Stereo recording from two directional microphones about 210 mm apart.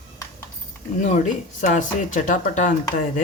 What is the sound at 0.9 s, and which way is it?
Speech, 35° left (ahead or behind).